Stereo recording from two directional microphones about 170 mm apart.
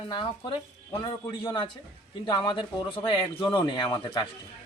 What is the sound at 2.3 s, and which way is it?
Speech, 30° left (ahead or behind).